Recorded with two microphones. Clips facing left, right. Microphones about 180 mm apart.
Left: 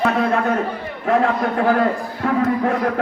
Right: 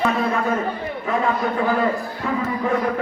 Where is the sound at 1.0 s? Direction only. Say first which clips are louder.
Left 4 dB; 70° left (ahead or behind).